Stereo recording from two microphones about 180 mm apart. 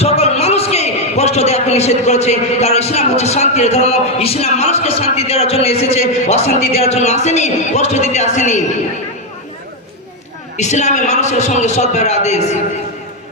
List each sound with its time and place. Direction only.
0.0 s a man's voice: 35° left (ahead or behind)
10.6 s a man's voice: 40° left (ahead or behind)